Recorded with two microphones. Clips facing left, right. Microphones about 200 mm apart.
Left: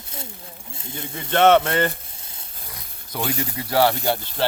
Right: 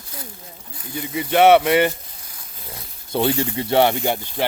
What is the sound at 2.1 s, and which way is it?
Sizzle, 25° left (ahead or behind).